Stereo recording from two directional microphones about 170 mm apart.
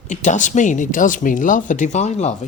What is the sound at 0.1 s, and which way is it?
Speech, 45° left (ahead or behind).